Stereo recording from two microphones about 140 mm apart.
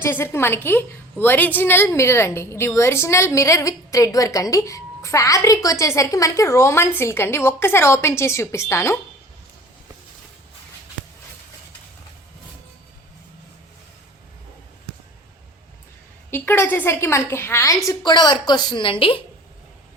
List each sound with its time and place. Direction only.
0.0 s a woman's voice: 15° left (ahead or behind)
16.3 s a woman's voice: 15° left (ahead or behind); by 19.2 s 40° left (ahead or behind)